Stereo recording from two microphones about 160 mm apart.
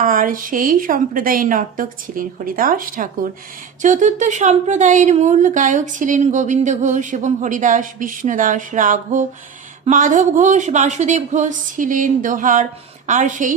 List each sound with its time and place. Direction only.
0.0 s a woman's voice: 60° right (ahead or behind)